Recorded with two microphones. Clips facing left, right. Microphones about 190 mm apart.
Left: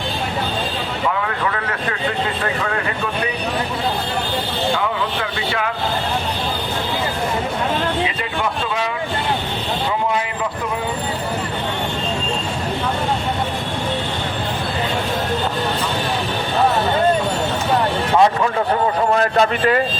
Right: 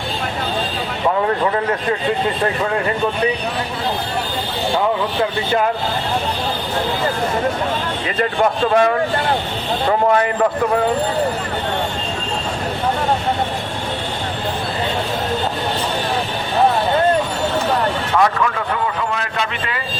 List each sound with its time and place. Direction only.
8.7 s speech: 50° right (ahead or behind)
18.2 s speech: 30° left (ahead or behind)